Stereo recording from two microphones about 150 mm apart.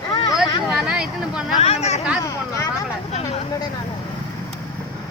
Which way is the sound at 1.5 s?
45° left (ahead or behind).